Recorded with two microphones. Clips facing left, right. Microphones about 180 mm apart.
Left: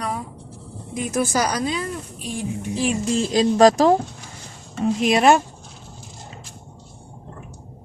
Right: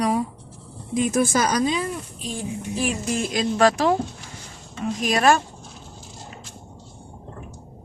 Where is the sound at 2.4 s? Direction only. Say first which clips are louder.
Left 2 dB; 25° left (ahead or behind).